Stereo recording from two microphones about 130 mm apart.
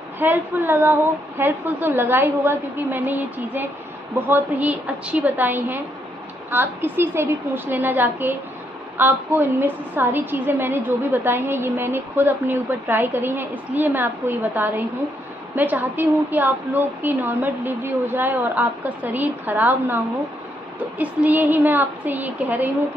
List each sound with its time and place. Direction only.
0.2 s a woman's voice: 15° right (ahead or behind)
21.0 s a woman's voice: 10° right (ahead or behind)